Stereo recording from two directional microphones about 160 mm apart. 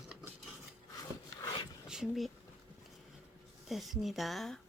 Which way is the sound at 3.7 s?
Centre (ahead or behind).